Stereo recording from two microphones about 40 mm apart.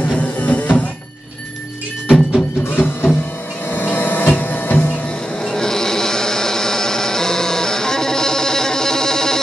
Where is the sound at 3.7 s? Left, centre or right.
Left.